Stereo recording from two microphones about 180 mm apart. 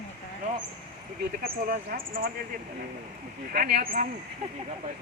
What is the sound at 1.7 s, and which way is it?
Speech, 55° right (ahead or behind).